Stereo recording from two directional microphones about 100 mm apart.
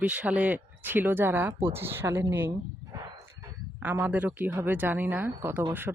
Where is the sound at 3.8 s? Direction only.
20° right (ahead or behind).